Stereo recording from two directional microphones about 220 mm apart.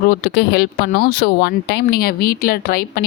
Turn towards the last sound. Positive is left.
turn(degrees=45)  # may be behind; listen again after turning